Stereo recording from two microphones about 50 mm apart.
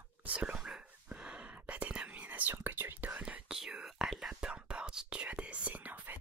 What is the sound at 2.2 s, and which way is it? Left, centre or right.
Whispering, right.